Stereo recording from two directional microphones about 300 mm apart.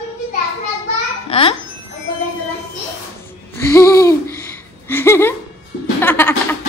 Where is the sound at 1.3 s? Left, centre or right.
Centre.